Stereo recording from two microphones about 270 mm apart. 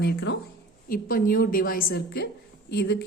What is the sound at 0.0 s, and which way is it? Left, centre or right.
Speech, left.